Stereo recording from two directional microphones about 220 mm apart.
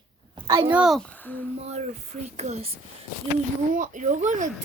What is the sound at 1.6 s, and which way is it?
A child's voice, 30° right (ahead or behind).